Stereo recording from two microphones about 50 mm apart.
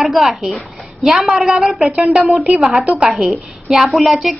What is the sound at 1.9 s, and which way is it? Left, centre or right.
A woman's voice, right.